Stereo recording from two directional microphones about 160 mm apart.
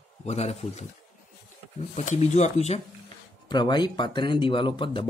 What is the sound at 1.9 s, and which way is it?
Speech, 45° left (ahead or behind).